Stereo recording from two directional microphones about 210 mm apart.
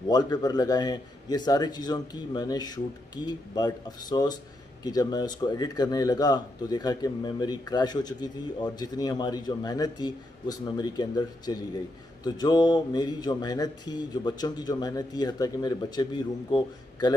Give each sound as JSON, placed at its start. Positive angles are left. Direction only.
{"t": 0.1, "sound": "speech", "side_deg": 20}